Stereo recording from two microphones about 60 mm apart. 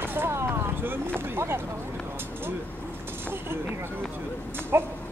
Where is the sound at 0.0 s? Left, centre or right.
Right.